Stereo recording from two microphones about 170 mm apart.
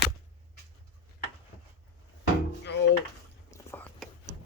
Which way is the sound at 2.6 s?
90° left.